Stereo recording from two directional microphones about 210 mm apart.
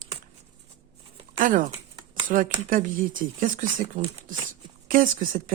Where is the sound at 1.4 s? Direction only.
40° right (ahead or behind).